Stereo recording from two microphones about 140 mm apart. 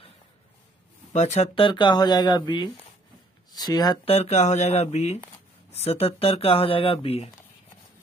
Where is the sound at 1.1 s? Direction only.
55° left (ahead or behind).